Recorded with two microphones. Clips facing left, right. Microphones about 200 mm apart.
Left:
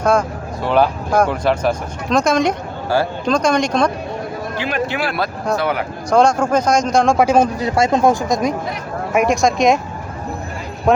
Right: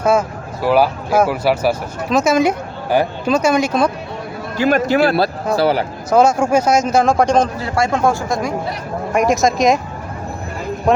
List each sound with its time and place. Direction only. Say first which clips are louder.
0.0 s speech: right 1 dB; 5° right (ahead or behind)
2.9 s speech: right 2 dB; 15° right (ahead or behind)
3.2 s speech: even; 5° right (ahead or behind)
4.5 s a man's voice: right 8 dB; 45° right (ahead or behind)
4.9 s a man's voice: right 7 dB; 30° right (ahead or behind)
6.1 s speech: right 1 dB; 5° right (ahead or behind)
7.6 s speech: left 2 dB; 20° left (ahead or behind)
9.1 s speech: even; centre (ahead or behind)
10.9 s speech: even; centre (ahead or behind)